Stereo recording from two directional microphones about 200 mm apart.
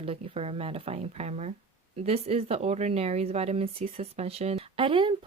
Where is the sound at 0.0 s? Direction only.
30° right (ahead or behind).